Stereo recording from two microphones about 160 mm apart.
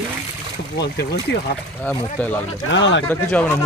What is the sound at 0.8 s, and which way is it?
Speech, 90° left.